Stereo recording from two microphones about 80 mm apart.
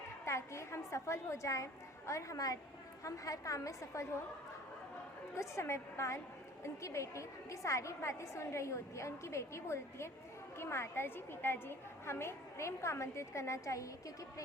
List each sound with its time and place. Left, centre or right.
0.3 s a woman's voice: left
5.4 s a woman's voice: left